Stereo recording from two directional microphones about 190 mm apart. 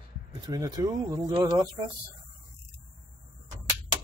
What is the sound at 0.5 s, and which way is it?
Speech, 20° right (ahead or behind).